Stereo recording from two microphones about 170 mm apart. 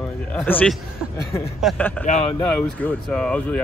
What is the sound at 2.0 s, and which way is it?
Speech, 40° left (ahead or behind).